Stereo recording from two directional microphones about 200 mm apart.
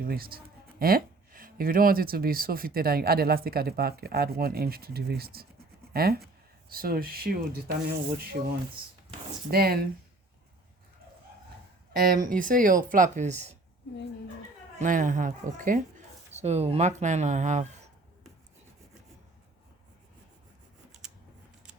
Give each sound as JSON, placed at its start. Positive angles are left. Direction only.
{"t": 0.0, "sound": "speech", "side_deg": -50}
{"t": 9.5, "sound": "speech", "side_deg": -50}
{"t": 11.9, "sound": "speech", "side_deg": -45}
{"t": 14.8, "sound": "speech", "side_deg": -40}